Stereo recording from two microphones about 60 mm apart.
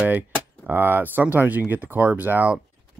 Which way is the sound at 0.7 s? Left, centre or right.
Right.